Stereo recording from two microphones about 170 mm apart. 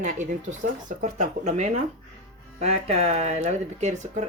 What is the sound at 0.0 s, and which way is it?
Speech, 50° right (ahead or behind).